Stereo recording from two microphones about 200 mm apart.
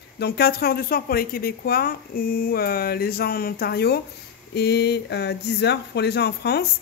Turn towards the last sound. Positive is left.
turn(degrees=55)  # may be behind; listen again after turning